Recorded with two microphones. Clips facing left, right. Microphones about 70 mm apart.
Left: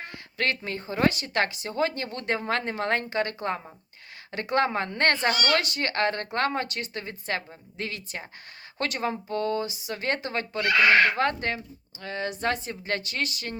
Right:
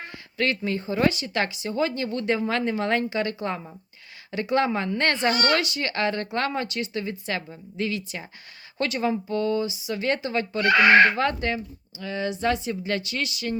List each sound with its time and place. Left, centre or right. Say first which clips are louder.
0.3 s speech: right 3 dB; left
5.3 s speech: right 3 dB; right
5.5 s speech: even; left
10.7 s speech: right 4 dB; right
11.2 s speech: right 1 dB; left